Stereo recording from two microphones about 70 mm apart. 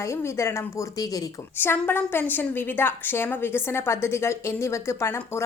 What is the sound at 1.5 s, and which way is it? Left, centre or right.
A woman's voice, left.